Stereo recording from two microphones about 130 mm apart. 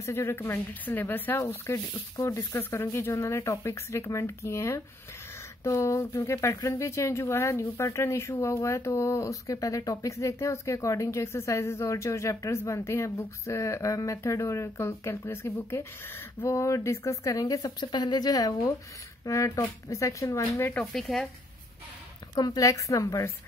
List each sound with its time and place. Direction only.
0.0 s speech: 20° left (ahead or behind)
20.7 s speech: centre (ahead or behind)
22.3 s speech: 25° left (ahead or behind)